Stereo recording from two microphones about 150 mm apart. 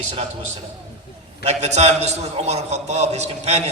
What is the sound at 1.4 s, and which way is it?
A man's voice, 45° right (ahead or behind).